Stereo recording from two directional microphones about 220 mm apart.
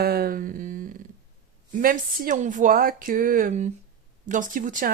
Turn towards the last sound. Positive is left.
turn(degrees=-35)  # may be behind; listen again after turning